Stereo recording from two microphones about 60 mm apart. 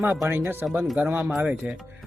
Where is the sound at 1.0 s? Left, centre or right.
Right.